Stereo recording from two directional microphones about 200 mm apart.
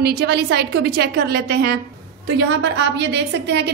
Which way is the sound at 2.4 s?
65° right (ahead or behind).